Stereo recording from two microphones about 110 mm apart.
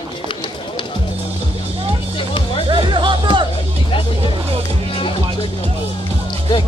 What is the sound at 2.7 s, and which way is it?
Music, 45° right (ahead or behind).